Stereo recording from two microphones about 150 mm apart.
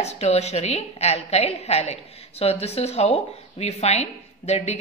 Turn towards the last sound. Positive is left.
turn(degrees=45)  # may be behind; listen again after turning